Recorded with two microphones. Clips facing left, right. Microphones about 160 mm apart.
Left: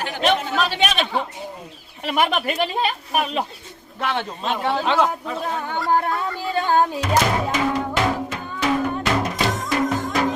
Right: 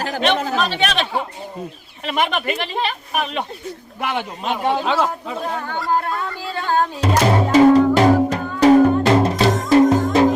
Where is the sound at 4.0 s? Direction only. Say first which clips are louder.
Even; 10° right (ahead or behind).